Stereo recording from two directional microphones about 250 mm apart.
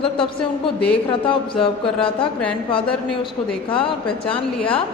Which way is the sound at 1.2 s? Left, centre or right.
Left.